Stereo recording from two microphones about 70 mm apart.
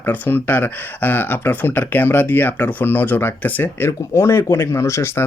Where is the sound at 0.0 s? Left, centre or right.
Left.